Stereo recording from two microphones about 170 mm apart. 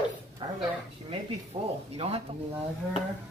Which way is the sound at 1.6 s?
35° right (ahead or behind).